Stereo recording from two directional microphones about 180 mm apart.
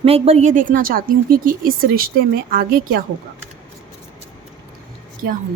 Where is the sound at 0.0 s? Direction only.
35° right (ahead or behind); by 3.0 s 55° right (ahead or behind).